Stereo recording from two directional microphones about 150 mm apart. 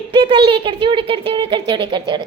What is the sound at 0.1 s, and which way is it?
Speech, 35° right (ahead or behind).